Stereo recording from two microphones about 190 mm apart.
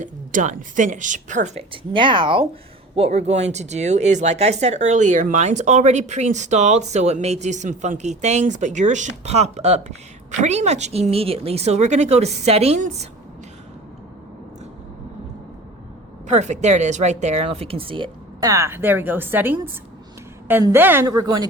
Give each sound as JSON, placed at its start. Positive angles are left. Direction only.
{"t": 0.0, "sound": "speech", "side_deg": -45}
{"t": 16.2, "sound": "a woman's voice", "side_deg": -40}